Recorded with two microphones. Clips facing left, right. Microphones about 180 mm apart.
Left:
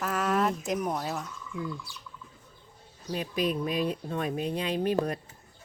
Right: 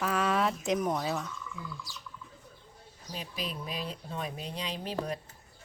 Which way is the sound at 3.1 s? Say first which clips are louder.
Left 10 dB; 55° left (ahead or behind).